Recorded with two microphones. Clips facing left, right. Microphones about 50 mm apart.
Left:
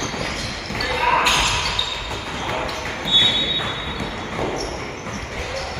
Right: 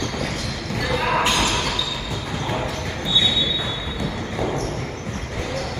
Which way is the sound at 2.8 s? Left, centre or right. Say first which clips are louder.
Left 4 dB; left.